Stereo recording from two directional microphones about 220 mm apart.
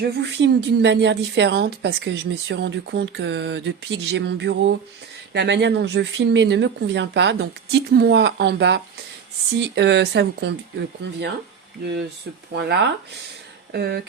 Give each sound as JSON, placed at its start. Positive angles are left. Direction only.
{"t": 0.0, "sound": "a woman's voice", "side_deg": -50}
{"t": 12.5, "sound": "a woman's voice", "side_deg": -50}